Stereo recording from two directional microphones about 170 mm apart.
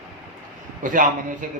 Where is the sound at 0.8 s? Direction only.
50° right (ahead or behind).